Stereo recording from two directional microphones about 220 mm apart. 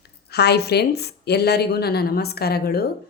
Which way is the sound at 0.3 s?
50° left (ahead or behind).